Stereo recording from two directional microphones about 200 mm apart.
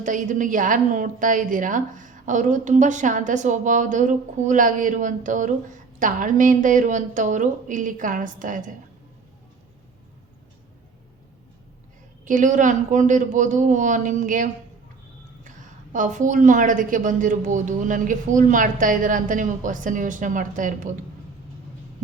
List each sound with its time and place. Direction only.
0.0 s a woman's voice: 40° right (ahead or behind)
12.2 s a woman's voice: 40° right (ahead or behind)